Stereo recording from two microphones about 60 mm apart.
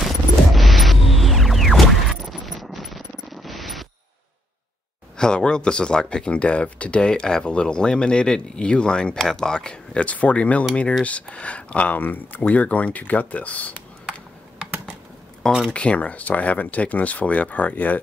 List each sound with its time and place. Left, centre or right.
0.0 s music: centre
5.1 s speech: centre
15.7 s speech: left